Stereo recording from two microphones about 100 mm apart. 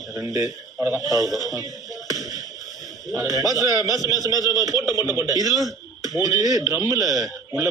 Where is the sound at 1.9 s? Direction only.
35° right (ahead or behind).